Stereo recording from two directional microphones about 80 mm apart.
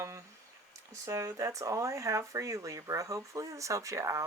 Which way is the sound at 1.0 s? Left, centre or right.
Right.